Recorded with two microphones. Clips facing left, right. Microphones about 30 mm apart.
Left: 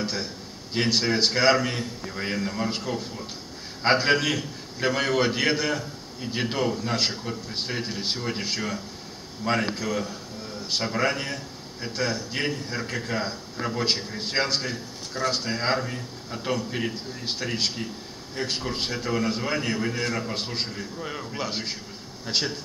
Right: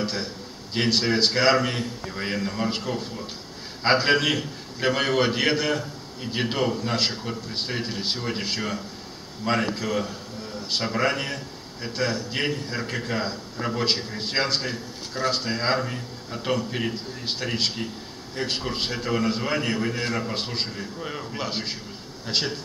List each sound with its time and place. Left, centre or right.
0.0 s a man's voice: centre